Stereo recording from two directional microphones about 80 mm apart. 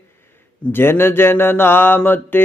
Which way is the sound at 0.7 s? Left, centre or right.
Left.